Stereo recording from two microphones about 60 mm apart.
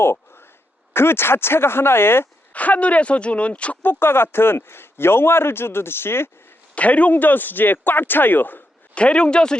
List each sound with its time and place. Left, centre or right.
0.0 s a sound: left
0.9 s speech: left
2.5 s speech: left
3.8 s speech: left
6.7 s speech: left
9.0 s a man's voice: centre